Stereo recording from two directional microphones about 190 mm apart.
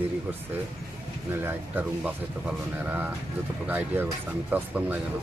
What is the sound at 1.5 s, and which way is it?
Speech, 10° right (ahead or behind).